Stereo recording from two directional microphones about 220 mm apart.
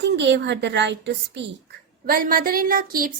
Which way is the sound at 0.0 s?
55° right (ahead or behind).